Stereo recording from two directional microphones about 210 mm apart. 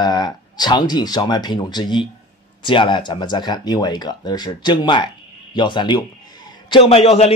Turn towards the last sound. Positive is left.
turn(degrees=30)  # may be behind; listen again after turning